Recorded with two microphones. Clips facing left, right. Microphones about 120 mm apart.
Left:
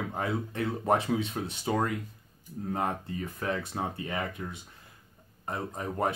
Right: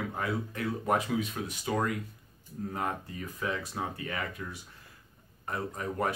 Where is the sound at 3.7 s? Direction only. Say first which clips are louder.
Left 2 dB; 25° left (ahead or behind).